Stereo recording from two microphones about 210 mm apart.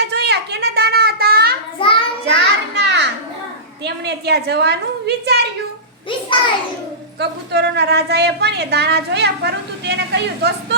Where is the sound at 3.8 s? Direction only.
50° right (ahead or behind).